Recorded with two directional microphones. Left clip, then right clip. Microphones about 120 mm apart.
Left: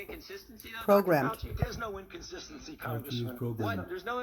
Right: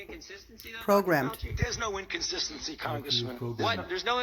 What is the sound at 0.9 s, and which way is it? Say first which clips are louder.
Speech: even; 30° right (ahead or behind).